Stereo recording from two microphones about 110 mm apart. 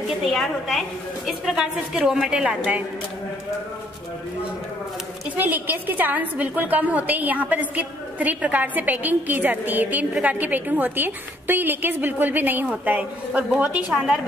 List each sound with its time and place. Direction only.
0.2 s a woman's voice: centre (ahead or behind)
5.3 s a woman's voice: 15° right (ahead or behind)